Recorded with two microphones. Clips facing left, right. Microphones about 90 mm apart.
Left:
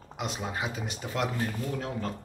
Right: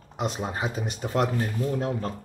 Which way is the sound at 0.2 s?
35° right (ahead or behind).